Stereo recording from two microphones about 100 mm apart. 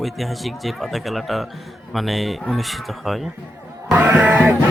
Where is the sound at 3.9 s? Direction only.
20° right (ahead or behind).